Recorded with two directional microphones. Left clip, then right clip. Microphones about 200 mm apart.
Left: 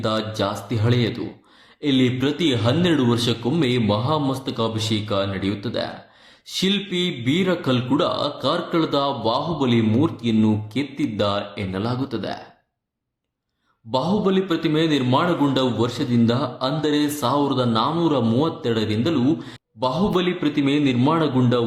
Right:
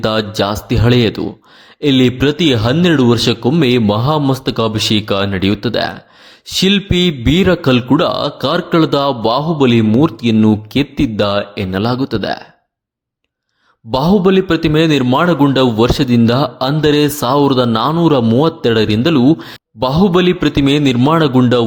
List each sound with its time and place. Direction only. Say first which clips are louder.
0.0 s a man's voice: right 8 dB; 40° right (ahead or behind)
13.9 s a man's voice: right 9 dB; 40° right (ahead or behind)